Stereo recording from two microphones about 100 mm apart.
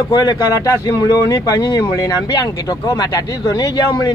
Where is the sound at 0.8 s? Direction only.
40° left (ahead or behind).